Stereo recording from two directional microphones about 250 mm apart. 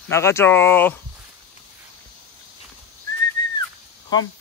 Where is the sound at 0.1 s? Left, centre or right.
Centre.